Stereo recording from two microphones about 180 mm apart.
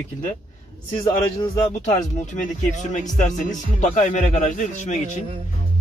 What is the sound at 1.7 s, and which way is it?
A man's voice, 40° left (ahead or behind).